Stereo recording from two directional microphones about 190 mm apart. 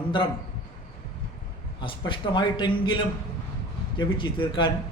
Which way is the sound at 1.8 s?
25° left (ahead or behind).